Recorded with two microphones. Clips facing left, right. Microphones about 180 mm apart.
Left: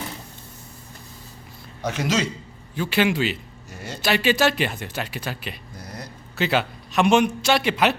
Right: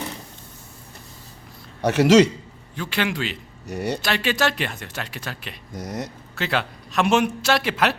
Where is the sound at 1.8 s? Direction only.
70° right (ahead or behind).